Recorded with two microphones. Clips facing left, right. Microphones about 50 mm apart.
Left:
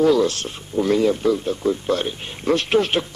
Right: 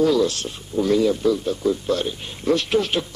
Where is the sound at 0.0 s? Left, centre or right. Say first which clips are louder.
Left 2 dB; left.